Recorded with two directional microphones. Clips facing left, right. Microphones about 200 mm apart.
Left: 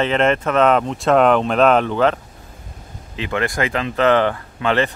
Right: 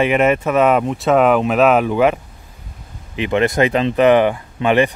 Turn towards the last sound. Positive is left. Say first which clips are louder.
# right 4 dB
turn(degrees=-15)  # may be behind; listen again after turning